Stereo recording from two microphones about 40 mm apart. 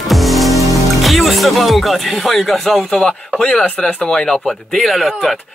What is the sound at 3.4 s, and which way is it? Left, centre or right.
Speech, centre.